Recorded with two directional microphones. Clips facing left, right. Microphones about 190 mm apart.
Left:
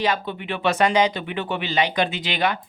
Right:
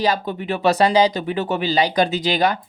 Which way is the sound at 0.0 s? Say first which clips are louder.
Right 3 dB; 40° right (ahead or behind).